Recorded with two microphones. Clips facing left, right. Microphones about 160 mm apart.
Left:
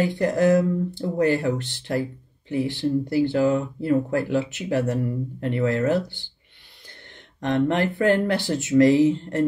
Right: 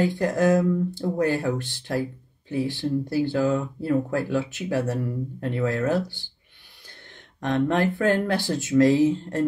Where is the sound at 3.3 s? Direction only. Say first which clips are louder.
Left 1 dB; 60° left (ahead or behind).